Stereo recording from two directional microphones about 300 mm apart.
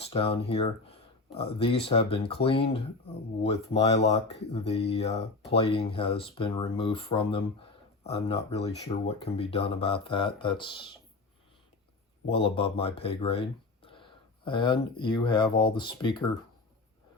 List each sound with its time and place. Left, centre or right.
0.0 s speech: centre
12.3 s speech: centre